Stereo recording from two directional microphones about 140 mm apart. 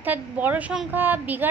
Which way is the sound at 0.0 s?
10° right (ahead or behind).